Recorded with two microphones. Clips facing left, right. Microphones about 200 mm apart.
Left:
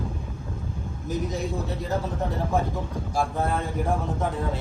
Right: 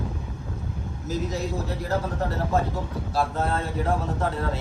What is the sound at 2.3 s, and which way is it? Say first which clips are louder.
Speech: even; 15° left (ahead or behind).